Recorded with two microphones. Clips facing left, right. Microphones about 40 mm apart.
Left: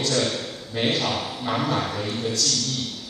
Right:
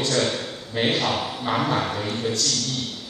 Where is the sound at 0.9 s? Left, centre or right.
Right.